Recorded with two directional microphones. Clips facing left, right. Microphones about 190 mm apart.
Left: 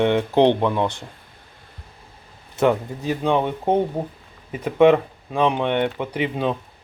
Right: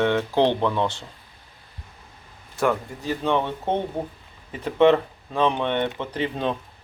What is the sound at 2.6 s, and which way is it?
Speech, 20° left (ahead or behind).